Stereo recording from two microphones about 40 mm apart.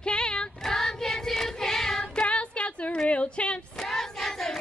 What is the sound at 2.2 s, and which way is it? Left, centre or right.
Female singing, left.